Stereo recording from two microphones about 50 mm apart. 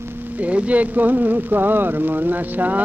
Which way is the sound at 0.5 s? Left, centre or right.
Right.